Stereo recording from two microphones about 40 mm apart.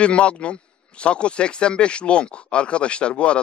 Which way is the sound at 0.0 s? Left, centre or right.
Left.